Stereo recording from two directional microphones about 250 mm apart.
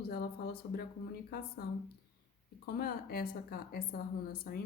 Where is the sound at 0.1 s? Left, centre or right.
Left.